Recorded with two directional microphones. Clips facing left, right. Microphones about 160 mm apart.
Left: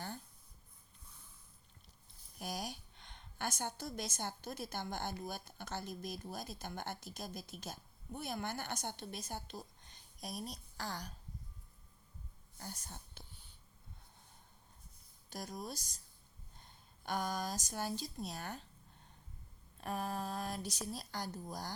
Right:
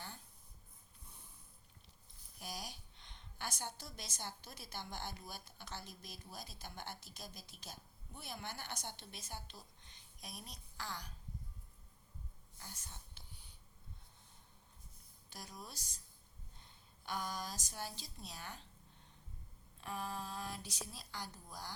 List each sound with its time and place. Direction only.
2.4 s a woman's voice: 50° left (ahead or behind)
12.5 s speech: 40° left (ahead or behind)
15.3 s speech: 45° left (ahead or behind)
19.8 s speech: 45° left (ahead or behind)